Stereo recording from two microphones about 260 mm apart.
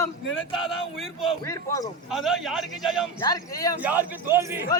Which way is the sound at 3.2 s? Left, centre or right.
Centre.